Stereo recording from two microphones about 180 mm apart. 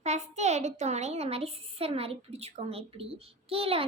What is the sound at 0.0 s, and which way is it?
A child's voice, 40° right (ahead or behind).